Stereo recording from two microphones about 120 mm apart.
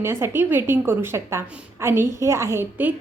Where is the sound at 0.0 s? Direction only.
20° right (ahead or behind).